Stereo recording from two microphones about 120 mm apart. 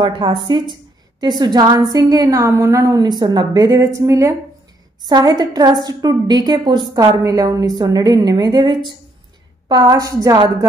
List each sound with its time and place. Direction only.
0.0 s a woman's voice: 40° right (ahead or behind)